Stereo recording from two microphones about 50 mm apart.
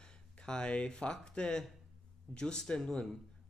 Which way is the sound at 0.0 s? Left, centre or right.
Centre.